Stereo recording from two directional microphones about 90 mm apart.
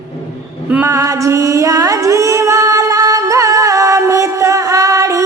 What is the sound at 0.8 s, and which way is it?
Music, 35° right (ahead or behind).